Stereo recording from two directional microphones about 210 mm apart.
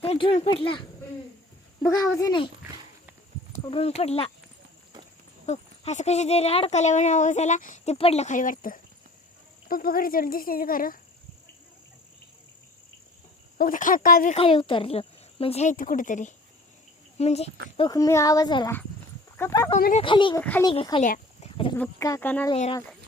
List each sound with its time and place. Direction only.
0.0 s speech: 25° left (ahead or behind)
1.9 s speech: 15° left (ahead or behind)
3.6 s speech: 25° left (ahead or behind)
5.5 s speech: 35° left (ahead or behind)
13.6 s speech: 40° left (ahead or behind)
14.3 s speech: 25° left (ahead or behind)
17.7 s speech: 20° left (ahead or behind)
20.4 s speech: 10° left (ahead or behind)
20.7 s speech: 20° left (ahead or behind)
21.0 s a sound: 40° left (ahead or behind)
21.8 s speech: 15° left (ahead or behind)